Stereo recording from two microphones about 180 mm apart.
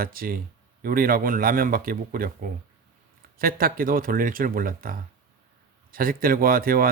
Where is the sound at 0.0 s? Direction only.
55° right (ahead or behind).